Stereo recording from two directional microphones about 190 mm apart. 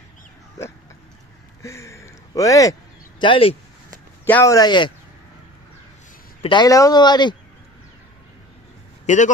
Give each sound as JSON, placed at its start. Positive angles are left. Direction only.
{"t": 1.6, "sound": "speech", "side_deg": 15}
{"t": 4.3, "sound": "speech", "side_deg": 15}
{"t": 6.4, "sound": "speech", "side_deg": 20}
{"t": 9.0, "sound": "speech", "side_deg": 40}